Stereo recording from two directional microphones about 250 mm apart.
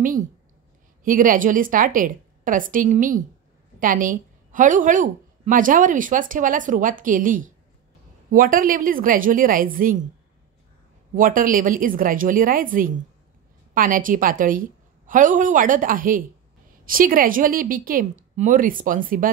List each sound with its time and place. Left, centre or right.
1.0 s a woman's voice: right
11.1 s a woman's voice: right